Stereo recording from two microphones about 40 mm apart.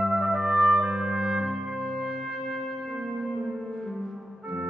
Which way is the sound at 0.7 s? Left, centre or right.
Centre.